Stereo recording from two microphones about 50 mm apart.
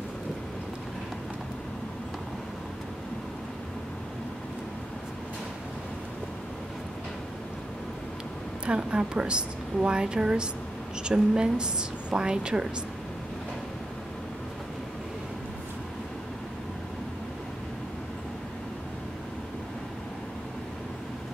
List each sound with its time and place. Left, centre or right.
8.6 s a woman's voice: centre